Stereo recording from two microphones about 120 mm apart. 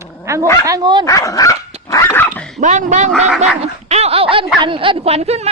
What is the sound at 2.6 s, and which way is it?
Speech, 90° right.